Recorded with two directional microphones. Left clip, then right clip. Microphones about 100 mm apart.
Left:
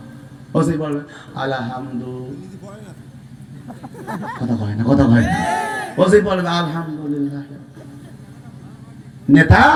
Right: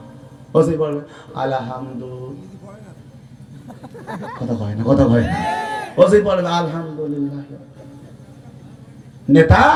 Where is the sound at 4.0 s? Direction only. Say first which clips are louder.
Left 2 dB; 15° left (ahead or behind).